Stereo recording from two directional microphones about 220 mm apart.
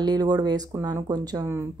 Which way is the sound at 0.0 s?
20° right (ahead or behind).